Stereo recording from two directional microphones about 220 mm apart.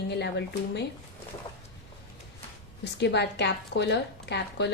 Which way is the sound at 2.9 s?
50° left (ahead or behind).